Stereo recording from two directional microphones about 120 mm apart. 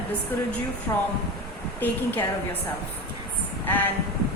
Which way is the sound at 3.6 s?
15° left (ahead or behind).